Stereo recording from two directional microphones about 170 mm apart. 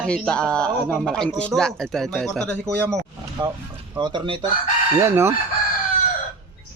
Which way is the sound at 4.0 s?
30° right (ahead or behind).